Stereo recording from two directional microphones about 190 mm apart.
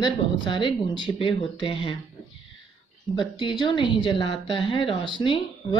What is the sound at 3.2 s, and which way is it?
A woman's voice, 25° left (ahead or behind).